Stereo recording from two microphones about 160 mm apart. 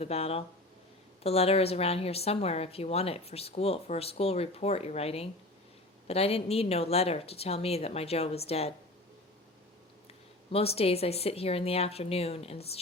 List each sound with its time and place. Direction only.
0.0 s a woman's voice: 40° left (ahead or behind)
10.5 s a woman's voice: 40° left (ahead or behind)